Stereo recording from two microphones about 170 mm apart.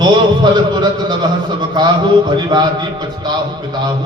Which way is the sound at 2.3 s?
25° right (ahead or behind).